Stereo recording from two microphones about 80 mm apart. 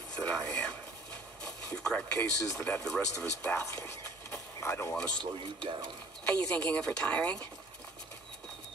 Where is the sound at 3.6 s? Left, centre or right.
Left.